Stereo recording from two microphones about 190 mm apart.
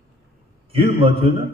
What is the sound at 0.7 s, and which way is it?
Speech, 30° right (ahead or behind).